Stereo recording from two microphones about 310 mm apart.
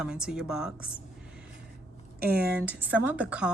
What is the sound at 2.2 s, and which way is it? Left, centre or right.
Speech, right.